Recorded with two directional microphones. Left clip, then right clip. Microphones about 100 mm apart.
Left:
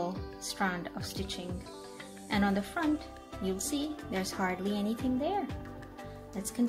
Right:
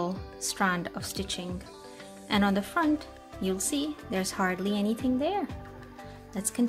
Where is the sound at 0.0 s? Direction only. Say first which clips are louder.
Right 3 dB; 50° right (ahead or behind).